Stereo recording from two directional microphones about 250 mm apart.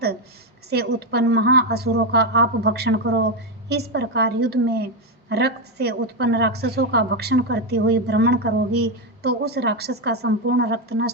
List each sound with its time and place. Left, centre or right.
0.7 s a woman's voice: right